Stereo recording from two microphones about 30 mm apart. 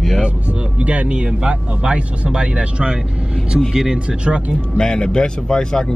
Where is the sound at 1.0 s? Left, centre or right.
Right.